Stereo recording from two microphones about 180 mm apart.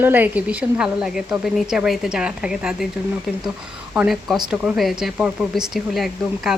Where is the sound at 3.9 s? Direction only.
Centre (ahead or behind).